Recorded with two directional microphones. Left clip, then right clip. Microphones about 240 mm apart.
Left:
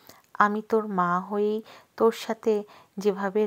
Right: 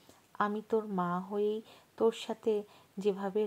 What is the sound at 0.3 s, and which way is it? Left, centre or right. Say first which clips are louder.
Speech: left 9 dB; left.